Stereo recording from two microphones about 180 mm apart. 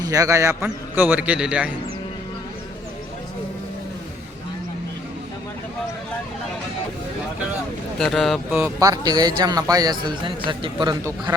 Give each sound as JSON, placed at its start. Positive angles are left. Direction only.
{"t": 0.0, "sound": "a man's voice", "side_deg": -20}
{"t": 7.9, "sound": "speech", "side_deg": 0}
{"t": 8.5, "sound": "a man's voice", "side_deg": -15}